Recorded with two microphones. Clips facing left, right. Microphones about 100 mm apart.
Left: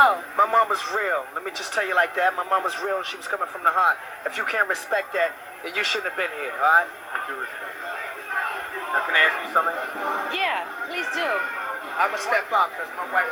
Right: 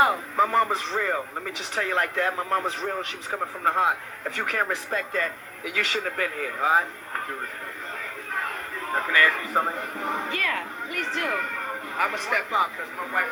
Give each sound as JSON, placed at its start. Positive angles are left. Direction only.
{"t": 0.0, "sound": "speech", "side_deg": 20}
{"t": 6.1, "sound": "speech", "side_deg": 35}
{"t": 8.9, "sound": "speech", "side_deg": 25}